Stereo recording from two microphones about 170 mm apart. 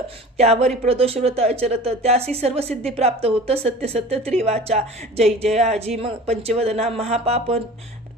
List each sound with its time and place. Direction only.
0.3 s speech: 40° right (ahead or behind)